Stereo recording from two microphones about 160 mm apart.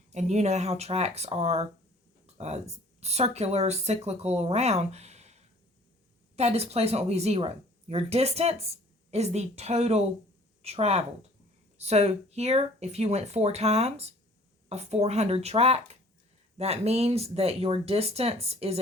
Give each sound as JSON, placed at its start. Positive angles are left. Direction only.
{"t": 0.1, "sound": "speech", "side_deg": -45}